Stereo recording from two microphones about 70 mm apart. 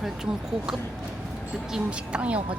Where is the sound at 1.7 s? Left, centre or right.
Centre.